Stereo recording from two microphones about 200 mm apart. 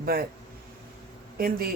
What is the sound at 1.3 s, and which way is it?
Speech, 50° right (ahead or behind).